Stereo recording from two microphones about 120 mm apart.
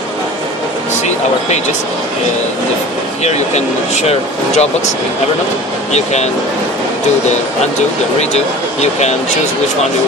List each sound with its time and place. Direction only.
3.3 s speech: 65° left (ahead or behind)